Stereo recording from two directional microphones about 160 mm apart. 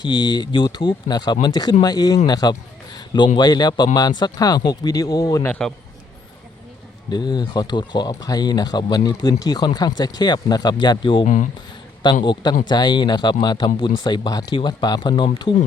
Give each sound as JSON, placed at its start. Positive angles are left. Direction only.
{"t": 0.0, "sound": "a man's voice", "side_deg": 30}
{"t": 5.5, "sound": "a man's voice", "side_deg": 5}
{"t": 7.1, "sound": "speech", "side_deg": 25}